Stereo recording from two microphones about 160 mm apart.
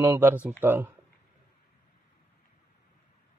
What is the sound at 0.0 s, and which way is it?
Speech, 15° right (ahead or behind).